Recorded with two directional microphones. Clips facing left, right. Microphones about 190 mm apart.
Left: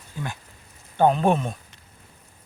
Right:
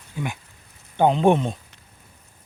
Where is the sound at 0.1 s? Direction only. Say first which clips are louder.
Right 3 dB; 10° right (ahead or behind).